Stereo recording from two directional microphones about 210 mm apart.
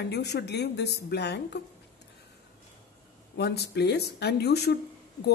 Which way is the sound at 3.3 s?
50° left (ahead or behind).